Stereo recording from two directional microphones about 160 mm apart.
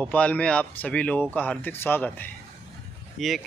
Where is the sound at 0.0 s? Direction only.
10° left (ahead or behind).